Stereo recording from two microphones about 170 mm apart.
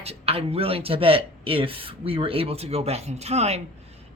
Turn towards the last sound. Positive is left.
turn(degrees=-40)  # may be behind; listen again after turning